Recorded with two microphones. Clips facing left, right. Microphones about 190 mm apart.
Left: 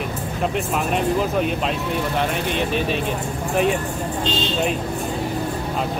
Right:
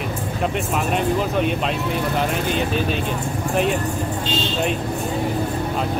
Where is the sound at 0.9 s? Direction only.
Centre (ahead or behind).